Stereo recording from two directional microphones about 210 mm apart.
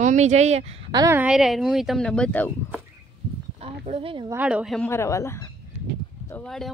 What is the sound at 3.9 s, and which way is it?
Speech, 25° right (ahead or behind).